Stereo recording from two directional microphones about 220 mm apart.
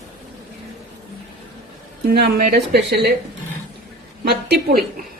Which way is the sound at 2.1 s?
40° right (ahead or behind).